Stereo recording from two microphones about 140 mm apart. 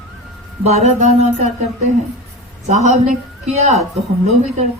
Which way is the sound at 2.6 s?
55° right (ahead or behind).